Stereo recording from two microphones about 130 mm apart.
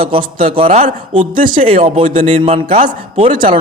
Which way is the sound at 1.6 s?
50° right (ahead or behind).